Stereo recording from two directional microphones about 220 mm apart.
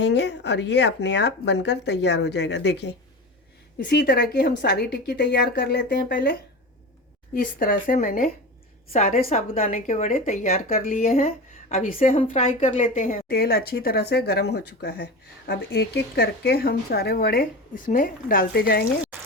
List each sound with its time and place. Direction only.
0.0 s speech: 50° left (ahead or behind)
7.3 s a woman's voice: 40° left (ahead or behind)
12.1 s speech: 25° left (ahead or behind); by 18.9 s 45° left (ahead or behind)